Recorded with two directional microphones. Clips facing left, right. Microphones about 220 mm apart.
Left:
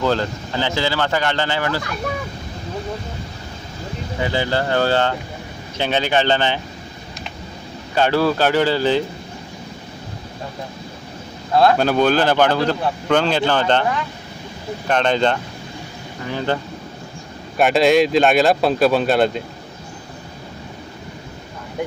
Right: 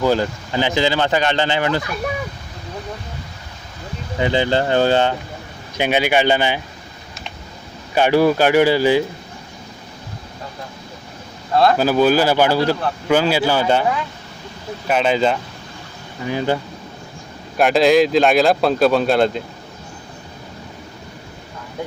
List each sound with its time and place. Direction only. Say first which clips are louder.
0.0 s speech: right 2 dB; 10° right (ahead or behind)
4.2 s speech: right 3 dB; 20° right (ahead or behind)
7.9 s speech: right 3 dB; 15° right (ahead or behind)
11.5 s speech: even; centre (ahead or behind)
17.6 s speech: right 1 dB; centre (ahead or behind)